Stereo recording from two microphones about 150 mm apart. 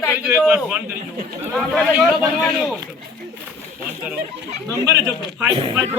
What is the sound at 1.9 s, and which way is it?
Speech, 5° right (ahead or behind).